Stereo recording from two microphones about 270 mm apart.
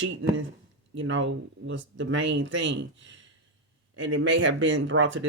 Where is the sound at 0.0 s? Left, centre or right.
Right.